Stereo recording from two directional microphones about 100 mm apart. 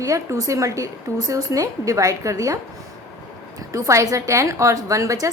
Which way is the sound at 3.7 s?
30° right (ahead or behind).